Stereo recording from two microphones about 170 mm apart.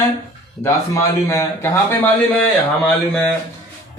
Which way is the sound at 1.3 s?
15° left (ahead or behind).